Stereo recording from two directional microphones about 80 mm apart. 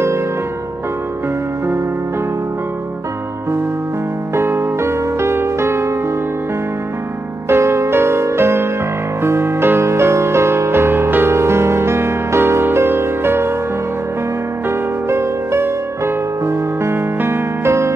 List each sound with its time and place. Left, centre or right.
4.4 s music: right
7.4 s music: right
15.0 s music: right